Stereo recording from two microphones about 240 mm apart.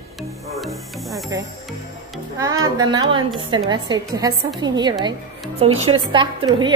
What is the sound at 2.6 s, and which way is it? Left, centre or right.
A woman's voice, centre.